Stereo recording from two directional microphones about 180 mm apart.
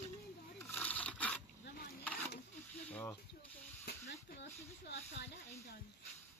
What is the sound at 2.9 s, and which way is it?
Snake, 10° left (ahead or behind).